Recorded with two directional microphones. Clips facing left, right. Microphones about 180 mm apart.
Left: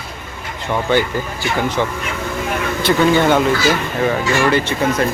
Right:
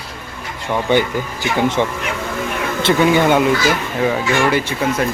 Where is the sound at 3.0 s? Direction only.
15° right (ahead or behind).